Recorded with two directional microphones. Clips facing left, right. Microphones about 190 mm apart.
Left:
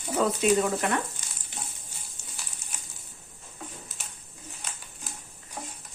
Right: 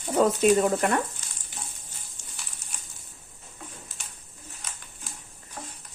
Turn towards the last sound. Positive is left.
turn(degrees=15)  # may be behind; listen again after turning